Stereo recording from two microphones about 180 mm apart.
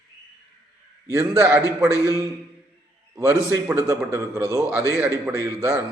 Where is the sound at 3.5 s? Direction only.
15° right (ahead or behind).